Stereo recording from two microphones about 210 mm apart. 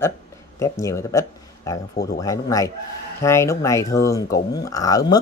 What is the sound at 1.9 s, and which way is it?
Speech, 50° left (ahead or behind).